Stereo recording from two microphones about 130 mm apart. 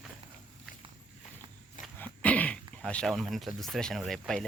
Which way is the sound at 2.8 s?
5° left (ahead or behind).